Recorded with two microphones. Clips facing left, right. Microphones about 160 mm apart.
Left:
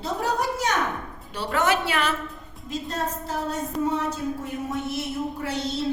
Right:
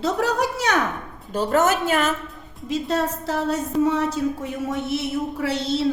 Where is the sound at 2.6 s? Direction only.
80° right.